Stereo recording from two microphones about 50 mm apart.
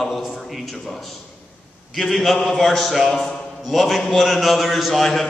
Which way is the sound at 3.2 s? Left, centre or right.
Centre.